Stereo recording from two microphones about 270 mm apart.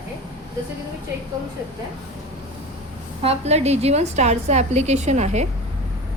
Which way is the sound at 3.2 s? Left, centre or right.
Right.